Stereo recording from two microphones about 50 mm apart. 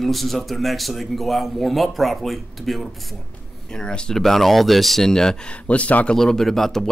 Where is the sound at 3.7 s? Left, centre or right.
Centre.